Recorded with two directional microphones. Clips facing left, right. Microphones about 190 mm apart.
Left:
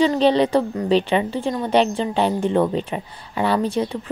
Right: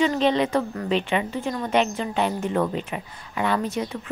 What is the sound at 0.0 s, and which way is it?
Speech, 30° left (ahead or behind).